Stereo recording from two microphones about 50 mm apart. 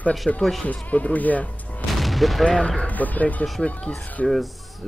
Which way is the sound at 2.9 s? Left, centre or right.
Left.